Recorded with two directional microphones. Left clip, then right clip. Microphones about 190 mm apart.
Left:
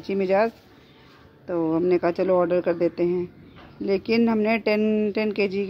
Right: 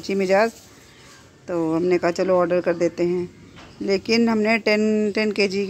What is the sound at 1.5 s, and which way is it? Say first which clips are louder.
Speech: right 1 dB; 5° left (ahead or behind).